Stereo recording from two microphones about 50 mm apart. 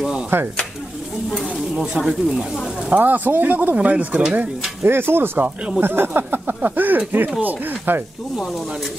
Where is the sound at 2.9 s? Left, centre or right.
Right.